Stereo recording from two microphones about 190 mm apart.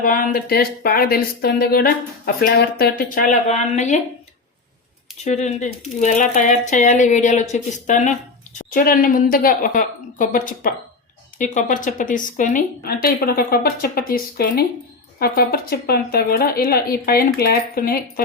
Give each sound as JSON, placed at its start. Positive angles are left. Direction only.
{"t": 0.0, "sound": "speech", "side_deg": 45}
{"t": 5.2, "sound": "speech", "side_deg": 35}